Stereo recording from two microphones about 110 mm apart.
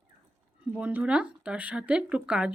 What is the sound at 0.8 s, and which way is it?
Speech, 15° right (ahead or behind).